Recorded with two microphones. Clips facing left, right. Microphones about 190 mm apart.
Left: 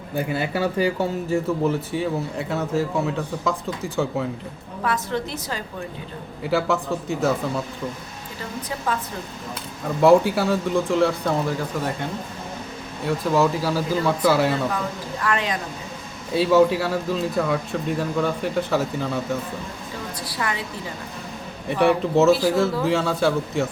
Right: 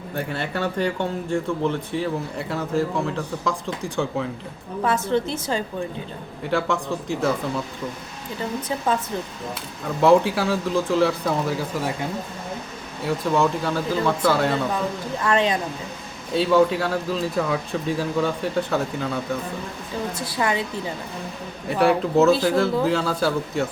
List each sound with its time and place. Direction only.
0.2 s speech: 10° left (ahead or behind)
4.8 s a woman's voice: 25° right (ahead or behind)
6.4 s speech: 5° left (ahead or behind)
10.0 s speech: centre (ahead or behind)
13.1 s speech: 5° left (ahead or behind)
15.2 s a woman's voice: 25° right (ahead or behind)
16.3 s speech: 5° left (ahead or behind)
20.1 s a woman's voice: 25° right (ahead or behind)
21.7 s speech: centre (ahead or behind)